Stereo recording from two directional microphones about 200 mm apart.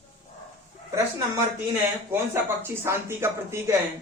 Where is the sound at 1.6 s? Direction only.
10° right (ahead or behind).